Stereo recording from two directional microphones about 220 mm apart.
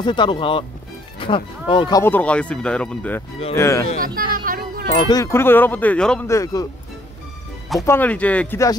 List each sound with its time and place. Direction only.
0.0 s speech: 20° left (ahead or behind)
4.0 s music: 40° right (ahead or behind)
5.0 s speech: 15° left (ahead or behind)
7.8 s speech: 10° left (ahead or behind)